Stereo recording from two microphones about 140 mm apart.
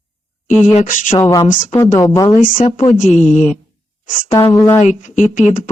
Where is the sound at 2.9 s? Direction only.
65° left (ahead or behind).